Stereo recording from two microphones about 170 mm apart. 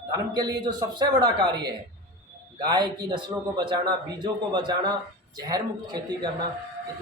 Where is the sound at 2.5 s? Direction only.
25° right (ahead or behind).